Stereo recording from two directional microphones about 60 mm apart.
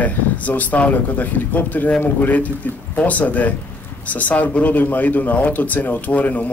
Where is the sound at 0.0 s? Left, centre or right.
Left.